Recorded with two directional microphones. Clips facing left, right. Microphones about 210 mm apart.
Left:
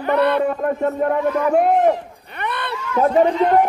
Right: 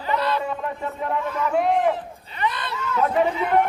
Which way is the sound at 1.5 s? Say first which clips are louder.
Left 4 dB; 45° left (ahead or behind).